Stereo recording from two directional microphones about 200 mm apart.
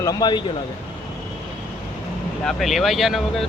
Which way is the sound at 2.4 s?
Centre (ahead or behind).